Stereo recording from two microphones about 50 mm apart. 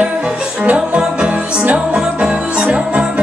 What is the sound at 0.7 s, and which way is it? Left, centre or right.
Music, centre.